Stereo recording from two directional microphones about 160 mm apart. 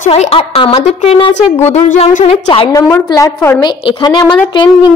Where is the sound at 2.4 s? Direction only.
30° left (ahead or behind).